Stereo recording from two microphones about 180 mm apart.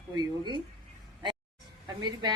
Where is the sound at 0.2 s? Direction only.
25° right (ahead or behind).